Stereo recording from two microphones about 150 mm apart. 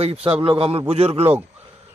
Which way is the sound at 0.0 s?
40° right (ahead or behind).